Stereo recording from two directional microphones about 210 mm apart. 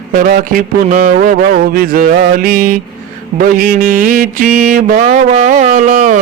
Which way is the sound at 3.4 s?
40° right (ahead or behind).